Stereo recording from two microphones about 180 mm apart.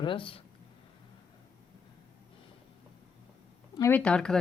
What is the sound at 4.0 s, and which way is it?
Speech, 5° left (ahead or behind).